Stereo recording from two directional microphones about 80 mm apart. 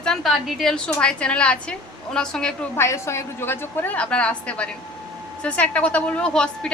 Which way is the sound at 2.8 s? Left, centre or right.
Left.